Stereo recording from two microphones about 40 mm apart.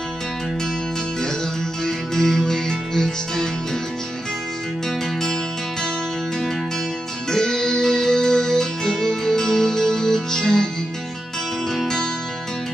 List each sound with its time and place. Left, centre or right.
1.9 s music: centre
7.2 s music: centre